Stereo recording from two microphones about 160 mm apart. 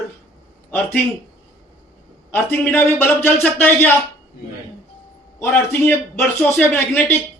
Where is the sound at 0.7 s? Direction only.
10° left (ahead or behind).